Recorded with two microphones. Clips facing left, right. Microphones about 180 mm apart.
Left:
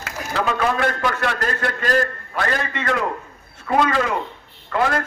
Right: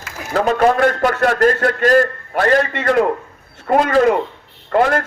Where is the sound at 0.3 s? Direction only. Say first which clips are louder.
Right 7 dB; 45° right (ahead or behind).